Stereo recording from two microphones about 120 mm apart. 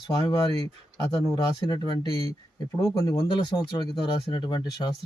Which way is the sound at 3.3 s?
40° left (ahead or behind).